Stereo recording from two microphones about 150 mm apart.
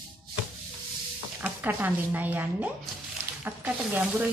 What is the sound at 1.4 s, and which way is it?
A woman's voice, 10° right (ahead or behind).